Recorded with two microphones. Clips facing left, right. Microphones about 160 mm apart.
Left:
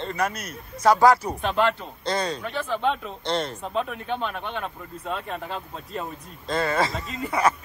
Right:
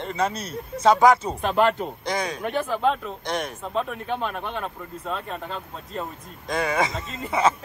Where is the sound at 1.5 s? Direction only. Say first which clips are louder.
Right 3 dB; 45° right (ahead or behind).